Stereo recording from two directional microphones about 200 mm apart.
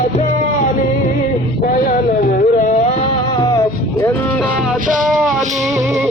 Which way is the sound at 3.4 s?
20° left (ahead or behind).